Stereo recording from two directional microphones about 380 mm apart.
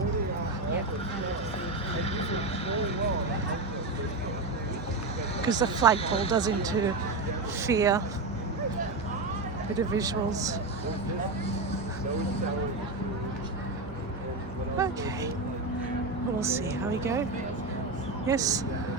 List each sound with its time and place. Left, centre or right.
2.1 s vehicle: centre
5.4 s speech: centre
6.0 s speech: centre
6.3 s a woman's voice: centre
9.9 s a woman's voice: centre
14.8 s a sound: centre
16.4 s a woman's voice: centre
18.3 s a woman's voice: centre